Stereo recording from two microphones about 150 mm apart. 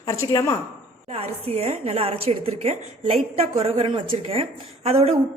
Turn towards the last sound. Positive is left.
turn(degrees=-40)  # may be behind; listen again after turning